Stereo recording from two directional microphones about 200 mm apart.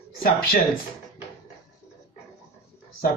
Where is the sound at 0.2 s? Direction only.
45° left (ahead or behind).